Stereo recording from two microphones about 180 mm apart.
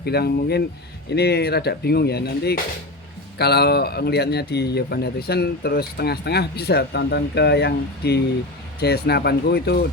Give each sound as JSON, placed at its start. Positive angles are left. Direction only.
{"t": 0.0, "sound": "speech", "side_deg": 60}